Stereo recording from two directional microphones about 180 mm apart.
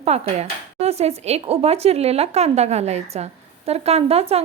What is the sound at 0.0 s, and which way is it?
A woman's voice, 35° right (ahead or behind).